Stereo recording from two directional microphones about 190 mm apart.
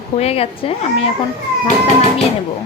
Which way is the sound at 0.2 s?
30° left (ahead or behind).